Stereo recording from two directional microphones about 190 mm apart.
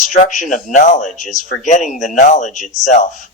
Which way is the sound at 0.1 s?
40° left (ahead or behind).